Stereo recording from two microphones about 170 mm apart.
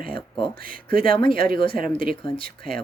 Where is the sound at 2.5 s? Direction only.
60° right (ahead or behind).